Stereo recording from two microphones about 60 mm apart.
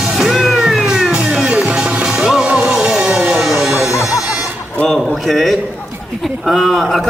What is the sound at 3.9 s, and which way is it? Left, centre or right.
Music, left.